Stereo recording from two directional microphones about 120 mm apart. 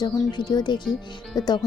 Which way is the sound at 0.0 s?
35° left (ahead or behind).